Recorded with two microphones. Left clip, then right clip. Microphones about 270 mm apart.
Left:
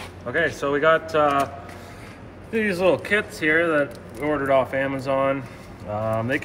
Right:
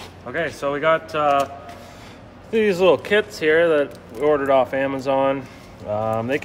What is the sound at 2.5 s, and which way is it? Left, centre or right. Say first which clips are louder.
Speech: right 4 dB; right.